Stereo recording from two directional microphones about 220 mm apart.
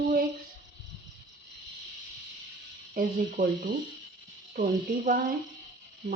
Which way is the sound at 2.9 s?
40° right (ahead or behind).